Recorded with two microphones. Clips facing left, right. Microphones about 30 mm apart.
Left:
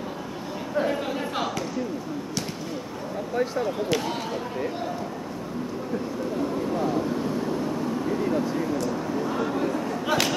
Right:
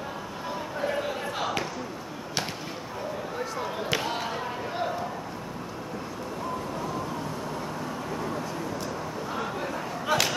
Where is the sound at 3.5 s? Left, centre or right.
Centre.